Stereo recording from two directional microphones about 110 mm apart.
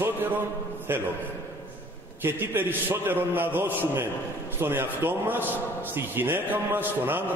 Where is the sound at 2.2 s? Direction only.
20° right (ahead or behind).